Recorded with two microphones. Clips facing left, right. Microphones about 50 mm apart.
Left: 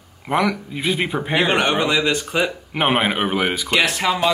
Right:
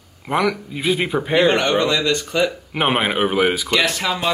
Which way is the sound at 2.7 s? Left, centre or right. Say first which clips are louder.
Even; centre.